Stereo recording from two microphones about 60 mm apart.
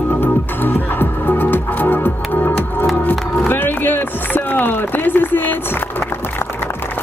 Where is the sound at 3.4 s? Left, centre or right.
Left.